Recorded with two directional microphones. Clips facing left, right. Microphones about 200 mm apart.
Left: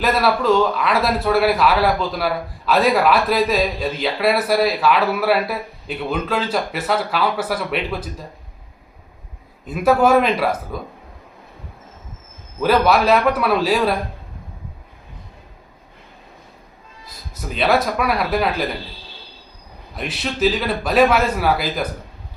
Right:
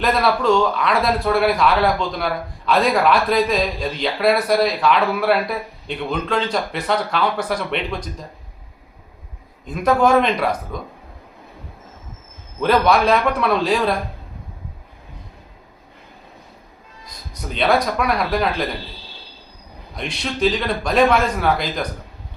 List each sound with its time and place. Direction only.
0.0 s speech: 5° left (ahead or behind)
9.6 s speech: 5° left (ahead or behind)
12.5 s speech: 5° left (ahead or behind)
17.1 s speech: 5° left (ahead or behind)
20.0 s speech: 5° left (ahead or behind)